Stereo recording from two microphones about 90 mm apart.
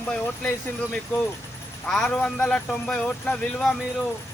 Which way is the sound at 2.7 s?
5° left (ahead or behind).